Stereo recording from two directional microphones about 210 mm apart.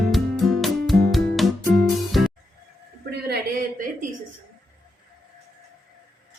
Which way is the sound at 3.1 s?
50° right (ahead or behind).